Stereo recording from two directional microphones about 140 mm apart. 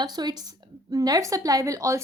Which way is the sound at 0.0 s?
30° right (ahead or behind).